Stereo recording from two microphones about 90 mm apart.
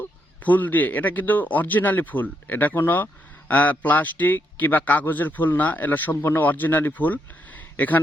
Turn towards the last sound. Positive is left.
turn(degrees=20)  # may be behind; listen again after turning